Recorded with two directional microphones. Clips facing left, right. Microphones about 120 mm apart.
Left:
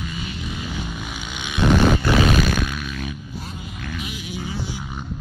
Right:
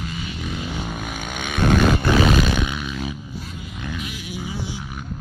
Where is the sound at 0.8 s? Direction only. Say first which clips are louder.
Right 2 dB; 50° right (ahead or behind).